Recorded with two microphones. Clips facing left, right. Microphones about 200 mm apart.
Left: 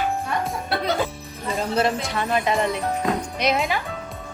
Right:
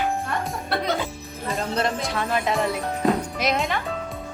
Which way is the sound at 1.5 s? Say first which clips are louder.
Left 3 dB; 5° left (ahead or behind).